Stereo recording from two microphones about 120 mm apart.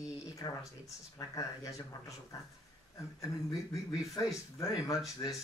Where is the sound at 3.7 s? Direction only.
25° left (ahead or behind).